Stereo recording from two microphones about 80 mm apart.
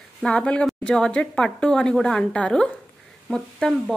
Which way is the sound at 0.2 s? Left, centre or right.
Centre.